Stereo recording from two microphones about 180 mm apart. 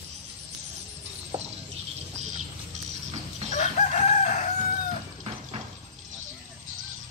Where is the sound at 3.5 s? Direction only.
40° left (ahead or behind).